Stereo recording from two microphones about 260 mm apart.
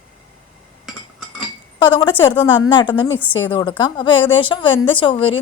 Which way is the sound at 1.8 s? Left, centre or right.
Centre.